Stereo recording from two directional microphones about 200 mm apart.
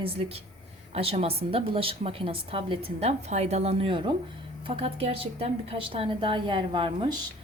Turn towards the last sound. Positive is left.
turn(degrees=-20)  # may be behind; listen again after turning